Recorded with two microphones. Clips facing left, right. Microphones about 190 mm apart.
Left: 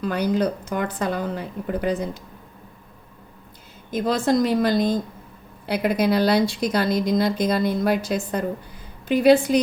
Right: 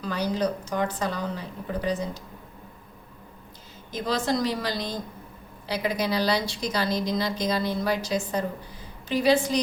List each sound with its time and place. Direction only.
0.0 s speech: 55° left (ahead or behind)
3.9 s speech: 50° left (ahead or behind)